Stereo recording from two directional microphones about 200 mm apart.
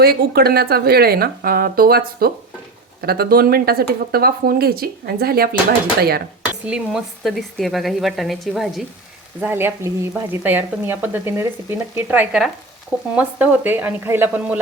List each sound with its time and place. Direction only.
0.0 s speech: 50° right (ahead or behind)
6.7 s speech: 5° right (ahead or behind)
9.4 s speech: 10° right (ahead or behind)